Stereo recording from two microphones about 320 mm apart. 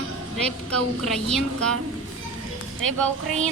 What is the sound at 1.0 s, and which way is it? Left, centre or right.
Speech, centre.